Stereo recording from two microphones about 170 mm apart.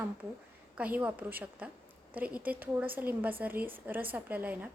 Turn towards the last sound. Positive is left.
turn(degrees=-10)  # may be behind; listen again after turning